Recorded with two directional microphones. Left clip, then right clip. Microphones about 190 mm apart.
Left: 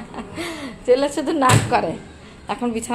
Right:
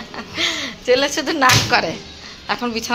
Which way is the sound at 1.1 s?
20° left (ahead or behind).